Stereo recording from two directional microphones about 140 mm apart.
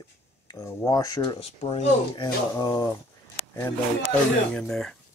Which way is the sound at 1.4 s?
45° left (ahead or behind).